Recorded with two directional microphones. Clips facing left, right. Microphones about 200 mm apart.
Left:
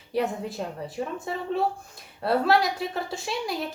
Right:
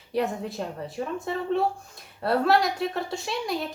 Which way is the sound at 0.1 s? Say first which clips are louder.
Even; centre (ahead or behind).